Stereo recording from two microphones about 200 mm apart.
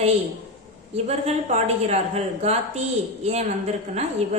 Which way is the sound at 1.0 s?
35° right (ahead or behind).